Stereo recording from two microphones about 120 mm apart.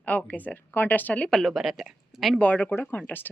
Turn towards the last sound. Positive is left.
turn(degrees=15)  # may be behind; listen again after turning